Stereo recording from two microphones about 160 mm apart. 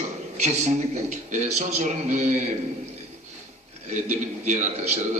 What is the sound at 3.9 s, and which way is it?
Speech, 50° right (ahead or behind).